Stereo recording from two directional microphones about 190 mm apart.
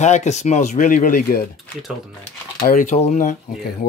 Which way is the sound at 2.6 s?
45° left (ahead or behind).